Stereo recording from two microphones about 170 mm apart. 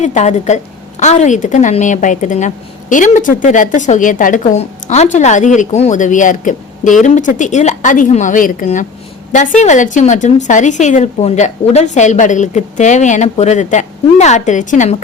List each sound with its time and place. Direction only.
0.0 s a woman's voice: 45° left (ahead or behind)